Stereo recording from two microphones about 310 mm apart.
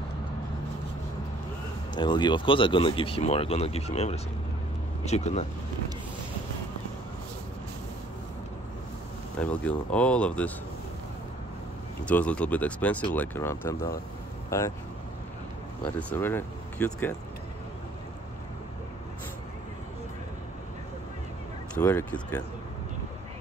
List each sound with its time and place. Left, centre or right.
2.0 s speech: centre
9.4 s speech: centre
12.0 s speech: centre
16.0 s speech: centre
21.7 s speech: centre